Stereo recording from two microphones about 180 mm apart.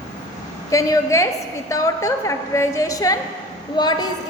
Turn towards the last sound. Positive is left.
turn(degrees=25)  # may be behind; listen again after turning